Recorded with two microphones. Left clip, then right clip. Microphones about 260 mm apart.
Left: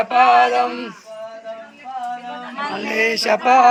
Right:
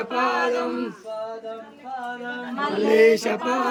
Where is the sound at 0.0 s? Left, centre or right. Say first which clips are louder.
Left 10 dB; centre.